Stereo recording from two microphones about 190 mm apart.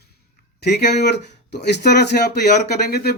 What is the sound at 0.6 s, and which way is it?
Speech, 60° left (ahead or behind).